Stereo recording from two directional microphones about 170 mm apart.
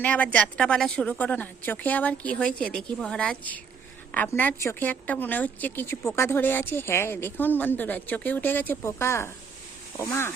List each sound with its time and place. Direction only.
0.0 s a woman's voice: 10° left (ahead or behind)